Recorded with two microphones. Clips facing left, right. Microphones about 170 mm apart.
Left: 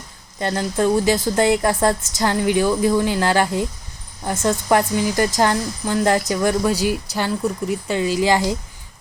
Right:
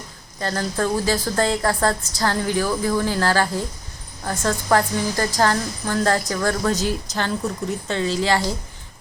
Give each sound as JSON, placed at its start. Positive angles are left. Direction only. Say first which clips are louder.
{"t": 0.3, "sound": "speech", "louder": "left 3 dB", "side_deg": 20}